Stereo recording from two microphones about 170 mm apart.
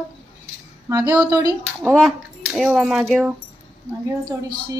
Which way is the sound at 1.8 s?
Centre (ahead or behind).